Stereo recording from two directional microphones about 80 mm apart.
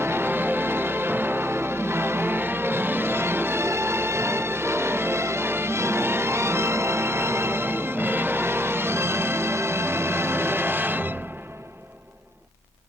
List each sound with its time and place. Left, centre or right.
0.0 s music: right